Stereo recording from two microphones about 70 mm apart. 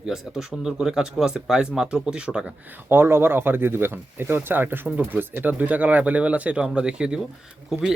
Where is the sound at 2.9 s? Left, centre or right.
Right.